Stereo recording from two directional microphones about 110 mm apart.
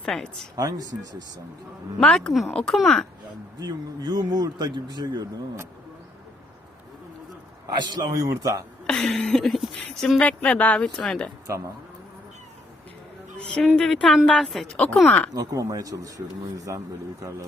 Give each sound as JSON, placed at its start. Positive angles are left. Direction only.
{"t": 0.0, "sound": "speech", "side_deg": 5}
{"t": 0.5, "sound": "speech", "side_deg": -35}
{"t": 2.0, "sound": "speech", "side_deg": 5}
{"t": 3.6, "sound": "speech", "side_deg": -35}
{"t": 7.8, "sound": "speech", "side_deg": -35}
{"t": 8.9, "sound": "speech", "side_deg": 10}
{"t": 10.2, "sound": "speech", "side_deg": 10}
{"t": 11.4, "sound": "speech", "side_deg": -30}
{"t": 13.5, "sound": "speech", "side_deg": 0}
{"t": 15.3, "sound": "speech", "side_deg": -35}